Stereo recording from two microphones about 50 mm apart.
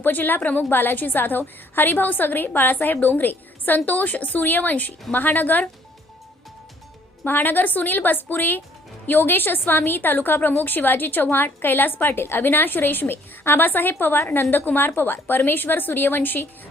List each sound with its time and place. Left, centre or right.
0.0 s a woman's voice: left
7.3 s a woman's voice: left